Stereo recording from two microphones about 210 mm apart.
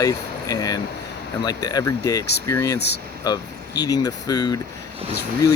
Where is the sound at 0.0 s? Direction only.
15° left (ahead or behind).